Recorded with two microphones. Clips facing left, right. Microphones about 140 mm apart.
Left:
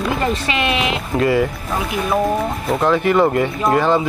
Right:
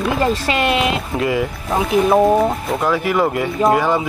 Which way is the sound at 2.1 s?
25° right (ahead or behind).